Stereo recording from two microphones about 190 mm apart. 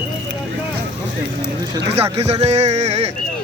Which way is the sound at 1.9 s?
35° right (ahead or behind).